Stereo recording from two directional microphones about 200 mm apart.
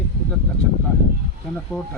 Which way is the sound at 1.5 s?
5° left (ahead or behind).